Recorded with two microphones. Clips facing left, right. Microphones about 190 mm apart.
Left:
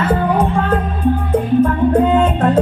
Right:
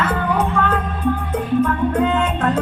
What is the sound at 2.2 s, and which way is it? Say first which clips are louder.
Music: left 5 dB; 30° left (ahead or behind).